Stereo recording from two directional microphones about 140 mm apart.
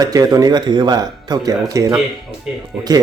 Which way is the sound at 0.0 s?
30° right (ahead or behind).